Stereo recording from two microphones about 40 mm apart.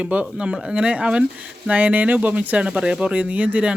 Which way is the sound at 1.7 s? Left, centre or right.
Right.